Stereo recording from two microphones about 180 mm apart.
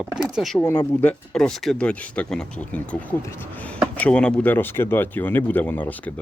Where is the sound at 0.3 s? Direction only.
Centre (ahead or behind).